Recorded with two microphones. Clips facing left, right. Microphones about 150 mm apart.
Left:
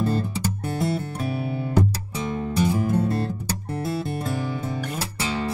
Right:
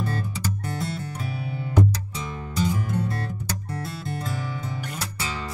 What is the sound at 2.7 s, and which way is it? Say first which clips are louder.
Music: left 5 dB; 25° left (ahead or behind).